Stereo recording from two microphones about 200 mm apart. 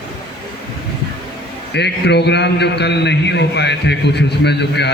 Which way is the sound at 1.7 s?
55° left (ahead or behind).